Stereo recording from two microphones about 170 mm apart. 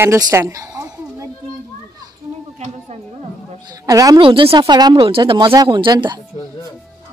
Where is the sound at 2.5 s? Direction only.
40° right (ahead or behind).